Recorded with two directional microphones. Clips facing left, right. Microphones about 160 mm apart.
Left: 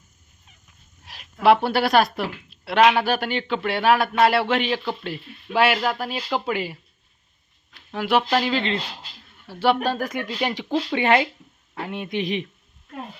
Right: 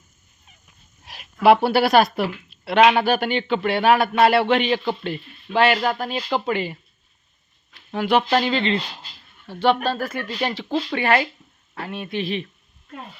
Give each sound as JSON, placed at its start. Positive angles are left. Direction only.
{"t": 1.0, "sound": "speech", "side_deg": -10}
{"t": 7.9, "sound": "speech", "side_deg": 5}